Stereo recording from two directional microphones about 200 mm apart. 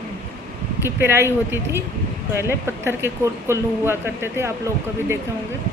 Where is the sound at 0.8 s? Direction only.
10° right (ahead or behind).